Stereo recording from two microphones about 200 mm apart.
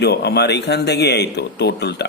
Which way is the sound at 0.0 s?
55° left (ahead or behind).